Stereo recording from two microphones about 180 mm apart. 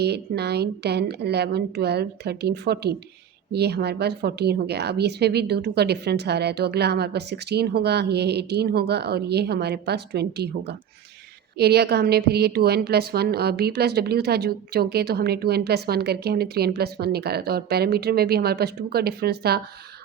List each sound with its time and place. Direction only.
0.0 s a woman's voice: 65° right (ahead or behind)